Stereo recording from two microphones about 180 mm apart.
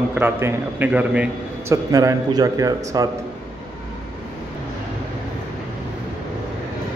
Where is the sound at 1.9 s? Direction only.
20° right (ahead or behind).